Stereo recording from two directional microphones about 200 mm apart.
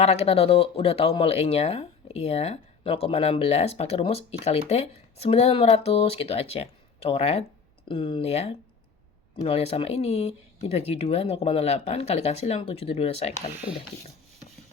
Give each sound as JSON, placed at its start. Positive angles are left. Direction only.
{"t": 0.0, "sound": "speech", "side_deg": 30}